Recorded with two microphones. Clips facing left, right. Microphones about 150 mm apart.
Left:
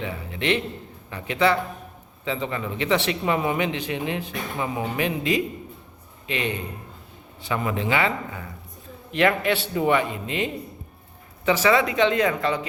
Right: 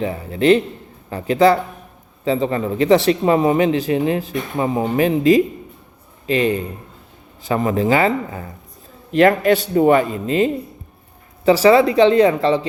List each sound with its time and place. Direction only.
0.0 s a man's voice: 40° right (ahead or behind)